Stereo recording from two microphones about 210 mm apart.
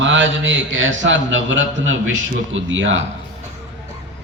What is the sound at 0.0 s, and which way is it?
Mantra, 60° right (ahead or behind).